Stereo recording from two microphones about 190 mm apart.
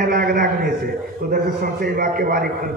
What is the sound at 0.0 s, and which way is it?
A man's voice, 50° right (ahead or behind).